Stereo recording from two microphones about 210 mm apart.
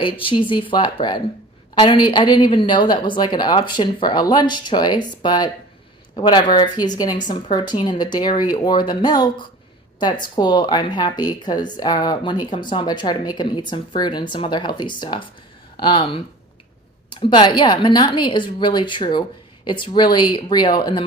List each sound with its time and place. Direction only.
0.0 s speech: 25° left (ahead or behind)